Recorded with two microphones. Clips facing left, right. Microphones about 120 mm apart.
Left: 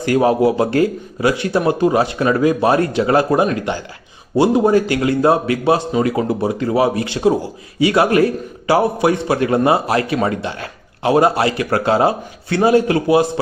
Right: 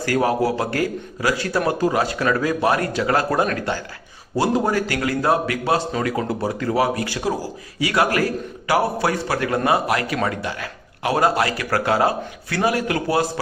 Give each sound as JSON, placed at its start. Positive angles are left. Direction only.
{"t": 0.0, "sound": "a man's voice", "side_deg": 20}